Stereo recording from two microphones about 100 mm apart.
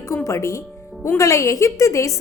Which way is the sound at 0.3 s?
30° left (ahead or behind).